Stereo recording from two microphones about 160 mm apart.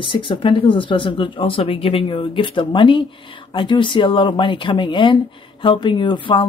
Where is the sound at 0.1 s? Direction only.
30° left (ahead or behind).